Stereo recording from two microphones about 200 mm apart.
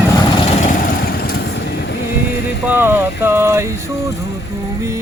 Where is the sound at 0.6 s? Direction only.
45° left (ahead or behind).